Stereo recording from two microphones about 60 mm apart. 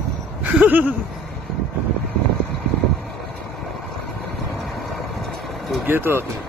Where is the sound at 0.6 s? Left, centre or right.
Right.